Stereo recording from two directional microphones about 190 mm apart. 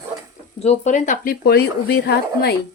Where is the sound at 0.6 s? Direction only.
35° left (ahead or behind); by 2.5 s 55° left (ahead or behind).